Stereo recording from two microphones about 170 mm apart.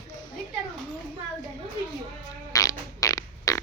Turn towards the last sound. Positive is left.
turn(degrees=20)  # may be behind; listen again after turning